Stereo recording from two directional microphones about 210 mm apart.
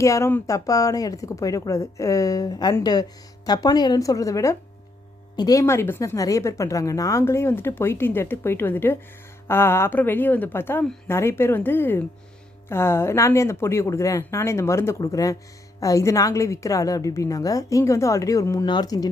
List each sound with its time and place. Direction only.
0.0 s speech: 15° left (ahead or behind)